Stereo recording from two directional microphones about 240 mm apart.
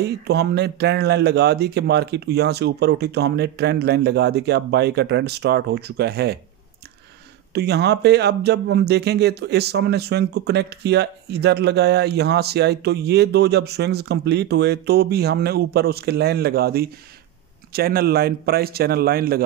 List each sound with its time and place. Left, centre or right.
0.0 s speech: right
7.5 s a man's voice: right